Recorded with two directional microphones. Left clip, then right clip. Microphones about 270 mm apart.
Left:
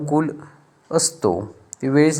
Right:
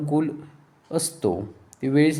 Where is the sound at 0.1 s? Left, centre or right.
Centre.